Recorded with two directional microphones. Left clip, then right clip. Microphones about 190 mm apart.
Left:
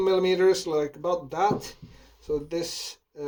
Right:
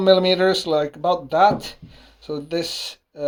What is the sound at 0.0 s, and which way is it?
Speech, 45° right (ahead or behind).